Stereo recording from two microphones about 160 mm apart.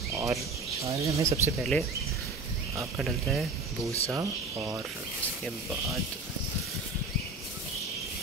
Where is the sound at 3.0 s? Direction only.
Centre (ahead or behind).